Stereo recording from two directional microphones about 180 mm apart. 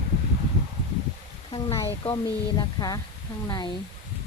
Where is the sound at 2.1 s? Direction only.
20° left (ahead or behind).